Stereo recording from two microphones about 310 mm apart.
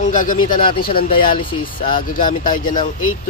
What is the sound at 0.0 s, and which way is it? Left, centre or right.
Speech, left.